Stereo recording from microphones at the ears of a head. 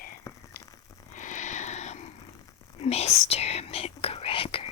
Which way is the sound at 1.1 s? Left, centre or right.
Left.